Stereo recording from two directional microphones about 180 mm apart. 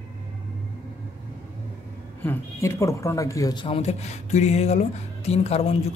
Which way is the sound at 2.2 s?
15° left (ahead or behind).